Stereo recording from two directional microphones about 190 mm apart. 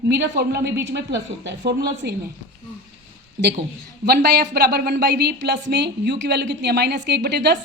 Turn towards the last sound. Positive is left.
turn(degrees=-60)  # may be behind; listen again after turning